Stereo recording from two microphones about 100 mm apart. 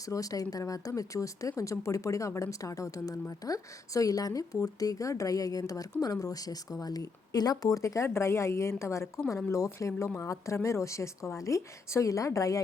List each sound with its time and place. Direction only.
0.0 s speech: 35° left (ahead or behind)